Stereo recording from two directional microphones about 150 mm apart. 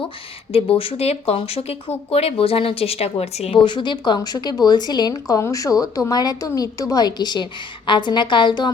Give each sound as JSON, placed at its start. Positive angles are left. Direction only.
{"t": 0.5, "sound": "a woman's voice", "side_deg": 40}